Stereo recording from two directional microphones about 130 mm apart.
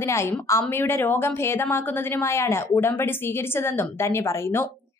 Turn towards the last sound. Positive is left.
turn(degrees=20)  # may be behind; listen again after turning